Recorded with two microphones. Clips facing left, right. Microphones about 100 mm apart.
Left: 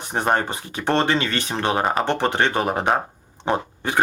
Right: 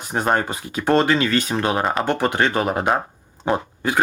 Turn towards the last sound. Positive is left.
turn(degrees=25)  # may be behind; listen again after turning